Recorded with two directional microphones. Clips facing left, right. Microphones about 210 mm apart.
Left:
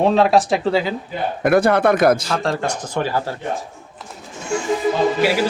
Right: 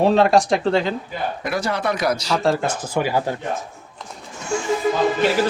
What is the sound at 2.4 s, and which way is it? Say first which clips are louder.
Speech: right 2 dB; 5° right (ahead or behind).